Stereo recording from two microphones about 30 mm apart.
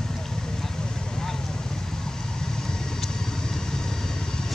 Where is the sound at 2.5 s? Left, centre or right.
Centre.